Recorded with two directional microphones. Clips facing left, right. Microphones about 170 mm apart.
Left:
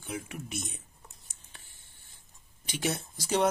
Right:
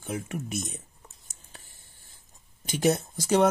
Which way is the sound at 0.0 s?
45° right (ahead or behind).